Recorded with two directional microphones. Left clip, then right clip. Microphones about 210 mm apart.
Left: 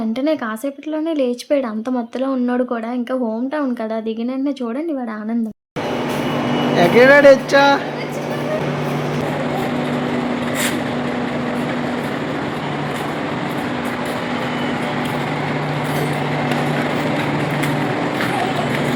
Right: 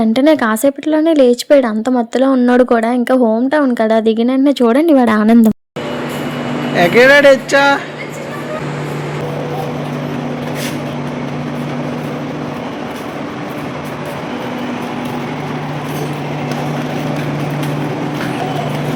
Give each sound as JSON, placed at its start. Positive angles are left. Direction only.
{"t": 0.1, "sound": "speech", "side_deg": -40}
{"t": 6.7, "sound": "speech", "side_deg": -10}